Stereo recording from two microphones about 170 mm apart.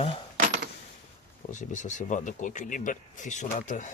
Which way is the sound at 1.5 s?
45° left (ahead or behind).